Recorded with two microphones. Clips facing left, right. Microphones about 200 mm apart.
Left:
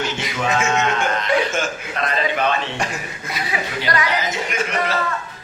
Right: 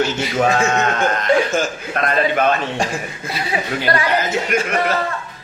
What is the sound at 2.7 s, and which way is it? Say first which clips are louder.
Speech: right 4 dB; 30° right (ahead or behind).